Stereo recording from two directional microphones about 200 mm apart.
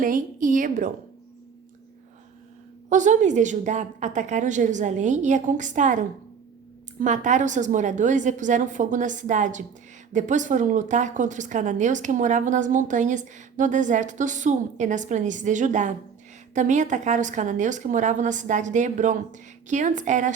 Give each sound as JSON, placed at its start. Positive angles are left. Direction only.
{"t": 0.0, "sound": "a woman's voice", "side_deg": -40}
{"t": 2.9, "sound": "a woman's voice", "side_deg": -40}